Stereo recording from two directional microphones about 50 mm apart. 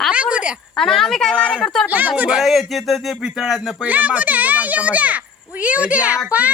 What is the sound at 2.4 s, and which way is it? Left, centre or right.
Speech, centre.